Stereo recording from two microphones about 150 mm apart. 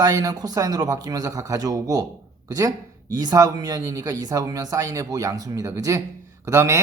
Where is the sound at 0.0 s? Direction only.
25° right (ahead or behind).